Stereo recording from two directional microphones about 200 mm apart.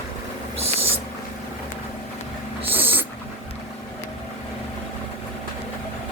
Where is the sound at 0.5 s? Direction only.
30° right (ahead or behind).